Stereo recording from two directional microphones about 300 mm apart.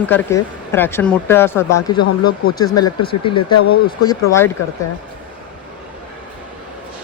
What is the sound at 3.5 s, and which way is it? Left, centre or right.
Speech, left.